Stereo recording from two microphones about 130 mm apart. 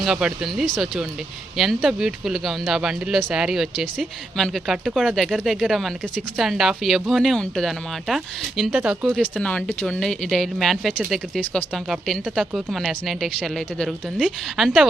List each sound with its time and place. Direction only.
0.0 s speech: 5° right (ahead or behind)
9.4 s speech: 10° left (ahead or behind)